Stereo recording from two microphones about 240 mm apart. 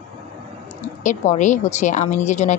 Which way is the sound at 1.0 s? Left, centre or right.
Left.